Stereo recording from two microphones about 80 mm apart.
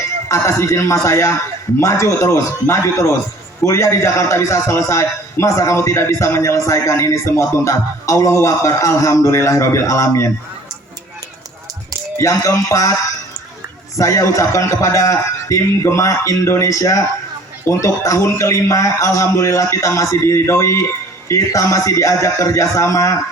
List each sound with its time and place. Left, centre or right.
0.3 s a man's voice: left
12.1 s a man's voice: left
14.0 s a man's voice: left